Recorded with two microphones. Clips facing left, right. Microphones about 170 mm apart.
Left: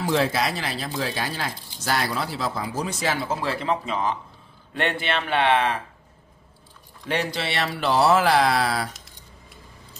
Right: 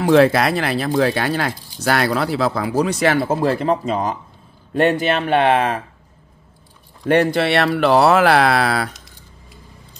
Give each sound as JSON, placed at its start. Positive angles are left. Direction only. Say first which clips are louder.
{"t": 0.0, "sound": "speech", "louder": "right 9 dB", "side_deg": -65}
{"t": 7.1, "sound": "speech", "louder": "right 11 dB", "side_deg": -55}